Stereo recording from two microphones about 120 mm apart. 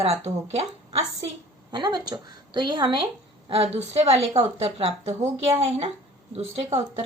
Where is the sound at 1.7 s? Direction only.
35° right (ahead or behind).